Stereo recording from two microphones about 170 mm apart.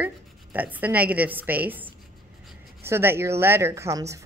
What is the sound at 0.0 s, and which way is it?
A woman's voice, 10° right (ahead or behind).